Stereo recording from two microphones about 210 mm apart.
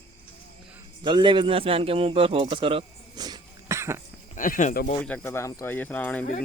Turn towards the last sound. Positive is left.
turn(degrees=5)  # may be behind; listen again after turning